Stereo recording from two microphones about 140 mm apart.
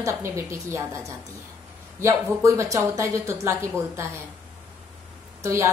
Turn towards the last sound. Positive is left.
turn(degrees=-20)  # may be behind; listen again after turning